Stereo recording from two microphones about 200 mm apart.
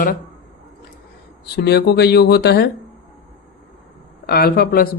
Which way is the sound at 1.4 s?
55° left (ahead or behind).